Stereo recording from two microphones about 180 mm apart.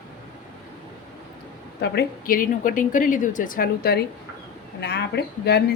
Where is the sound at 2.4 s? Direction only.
50° left (ahead or behind).